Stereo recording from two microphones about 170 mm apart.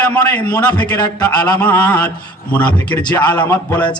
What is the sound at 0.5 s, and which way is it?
Speech, 25° left (ahead or behind).